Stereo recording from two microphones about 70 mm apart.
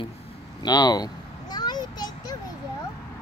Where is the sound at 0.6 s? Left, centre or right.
Left.